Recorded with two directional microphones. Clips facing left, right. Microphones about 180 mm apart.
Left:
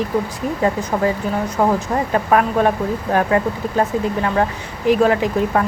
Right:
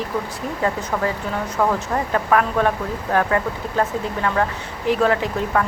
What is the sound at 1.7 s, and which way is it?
Speech, 20° left (ahead or behind).